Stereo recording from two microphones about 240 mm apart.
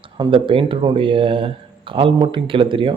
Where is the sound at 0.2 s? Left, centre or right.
Right.